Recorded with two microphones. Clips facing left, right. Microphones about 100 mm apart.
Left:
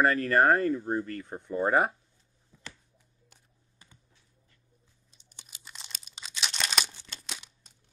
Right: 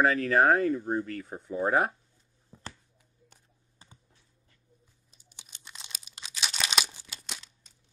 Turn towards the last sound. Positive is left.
turn(degrees=0)  # may be behind; listen again after turning